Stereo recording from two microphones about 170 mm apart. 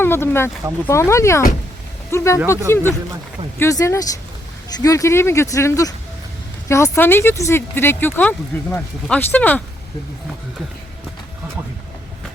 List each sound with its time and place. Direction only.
0.0 s speech: 15° left (ahead or behind)